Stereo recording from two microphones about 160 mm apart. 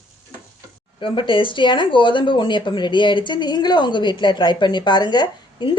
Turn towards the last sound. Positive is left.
turn(degrees=30)  # may be behind; listen again after turning